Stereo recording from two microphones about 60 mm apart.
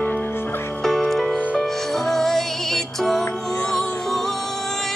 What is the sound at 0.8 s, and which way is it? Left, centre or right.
Music, centre.